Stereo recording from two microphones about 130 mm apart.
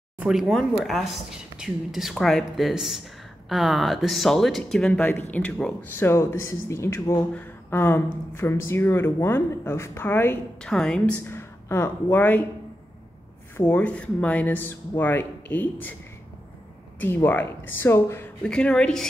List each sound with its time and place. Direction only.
0.2 s a woman's voice: 5° right (ahead or behind); by 10.3 s 15° left (ahead or behind)
10.6 s a woman's voice: 5° left (ahead or behind)
11.3 s speech: 20° left (ahead or behind)
13.6 s speech: 15° left (ahead or behind)
17.0 s speech: 15° left (ahead or behind)
18.4 s speech: 5° left (ahead or behind)